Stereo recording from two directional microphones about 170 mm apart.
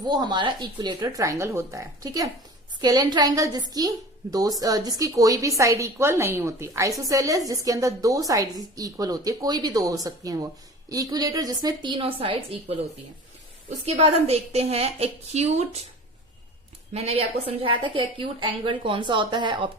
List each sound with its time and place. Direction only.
0.0 s a woman's voice: 25° right (ahead or behind)
16.9 s a woman's voice: 40° right (ahead or behind)